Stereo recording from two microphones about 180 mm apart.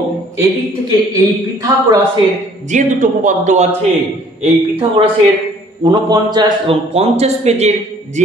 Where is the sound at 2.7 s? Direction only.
45° right (ahead or behind).